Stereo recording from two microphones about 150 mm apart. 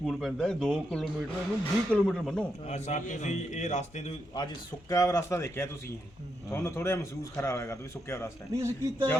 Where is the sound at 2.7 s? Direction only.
50° left (ahead or behind).